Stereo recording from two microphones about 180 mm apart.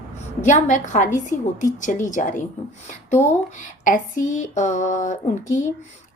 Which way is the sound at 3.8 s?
45° left (ahead or behind).